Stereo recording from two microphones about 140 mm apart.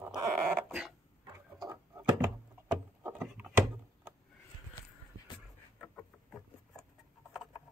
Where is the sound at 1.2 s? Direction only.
25° right (ahead or behind).